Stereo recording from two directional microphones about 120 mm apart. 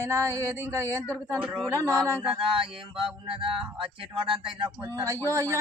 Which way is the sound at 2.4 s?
45° right (ahead or behind).